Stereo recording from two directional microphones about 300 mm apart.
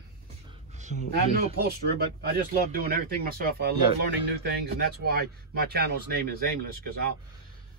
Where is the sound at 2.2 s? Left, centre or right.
Right.